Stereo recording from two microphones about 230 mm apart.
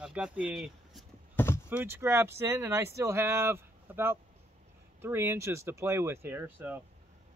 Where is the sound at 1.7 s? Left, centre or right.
Centre.